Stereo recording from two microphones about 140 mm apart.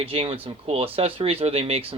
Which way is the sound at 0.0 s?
40° right (ahead or behind).